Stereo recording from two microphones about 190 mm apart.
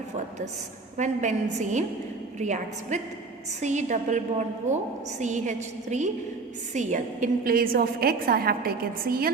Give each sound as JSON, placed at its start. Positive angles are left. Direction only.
{"t": 0.9, "sound": "a woman's voice", "side_deg": -40}